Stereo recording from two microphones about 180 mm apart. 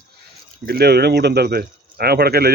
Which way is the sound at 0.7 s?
60° right (ahead or behind).